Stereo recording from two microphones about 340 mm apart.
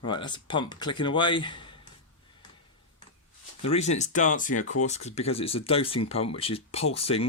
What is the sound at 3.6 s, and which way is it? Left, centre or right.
Speech, centre.